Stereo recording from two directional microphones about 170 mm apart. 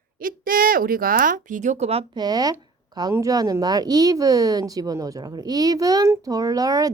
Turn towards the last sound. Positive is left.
turn(degrees=-20)  # may be behind; listen again after turning